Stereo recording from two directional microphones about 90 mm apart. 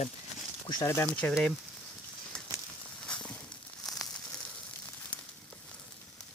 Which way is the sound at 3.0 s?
10° left (ahead or behind).